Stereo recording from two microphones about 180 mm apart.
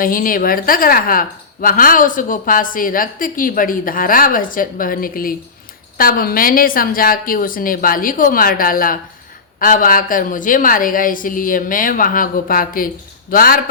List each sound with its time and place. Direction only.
0.0 s a woman's voice: 50° left (ahead or behind)